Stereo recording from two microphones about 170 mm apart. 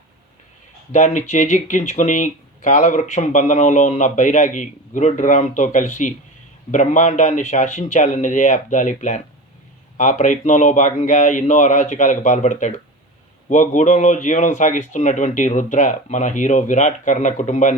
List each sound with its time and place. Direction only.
0.9 s speech: 45° left (ahead or behind)